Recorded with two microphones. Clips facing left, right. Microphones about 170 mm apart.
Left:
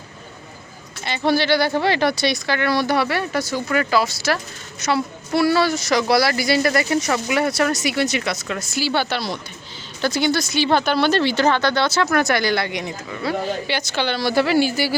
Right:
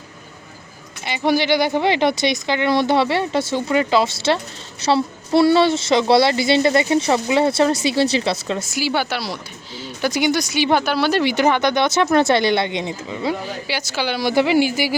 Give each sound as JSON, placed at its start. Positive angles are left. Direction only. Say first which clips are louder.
{"t": 1.0, "sound": "a woman's voice", "louder": "right 1 dB", "side_deg": -15}
{"t": 8.7, "sound": "speech", "louder": "left 2 dB", "side_deg": -10}
{"t": 13.7, "sound": "speech", "louder": "left 1 dB", "side_deg": -5}